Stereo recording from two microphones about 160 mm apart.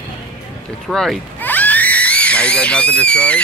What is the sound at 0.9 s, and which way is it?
Speech, 5° left (ahead or behind).